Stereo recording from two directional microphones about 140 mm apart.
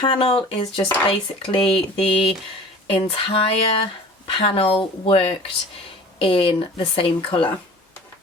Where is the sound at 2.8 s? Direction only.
40° left (ahead or behind).